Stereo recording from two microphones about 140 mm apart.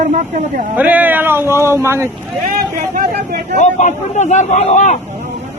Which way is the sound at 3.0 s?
70° right (ahead or behind).